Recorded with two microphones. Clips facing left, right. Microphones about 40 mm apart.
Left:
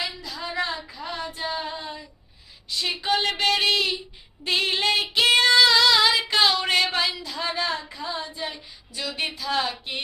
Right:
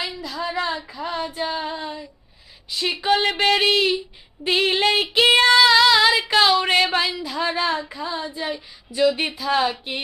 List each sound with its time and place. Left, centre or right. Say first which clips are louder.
0.0 s a woman's voice: right 2 dB; centre
0.3 s a woman's voice: right 5 dB; centre
0.9 s a sound: right 6 dB; centre
2.6 s child singing: right 3 dB; centre
3.1 s a sound: right 5 dB; right
5.1 s female singing: right 3 dB; right
6.6 s child singing: right 4 dB; centre